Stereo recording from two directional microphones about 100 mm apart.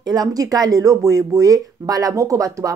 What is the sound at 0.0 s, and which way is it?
Speech, 40° right (ahead or behind).